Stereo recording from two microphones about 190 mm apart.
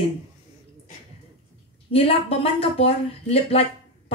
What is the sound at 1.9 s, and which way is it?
Speech, 30° left (ahead or behind).